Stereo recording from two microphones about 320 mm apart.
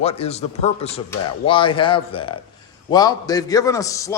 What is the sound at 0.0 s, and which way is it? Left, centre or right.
A man's voice, centre.